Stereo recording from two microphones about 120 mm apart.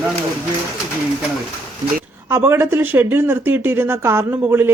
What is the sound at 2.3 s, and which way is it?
Speech, 20° right (ahead or behind).